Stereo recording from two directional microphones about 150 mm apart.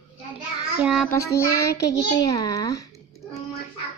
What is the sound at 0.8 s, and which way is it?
Speech, 5° right (ahead or behind).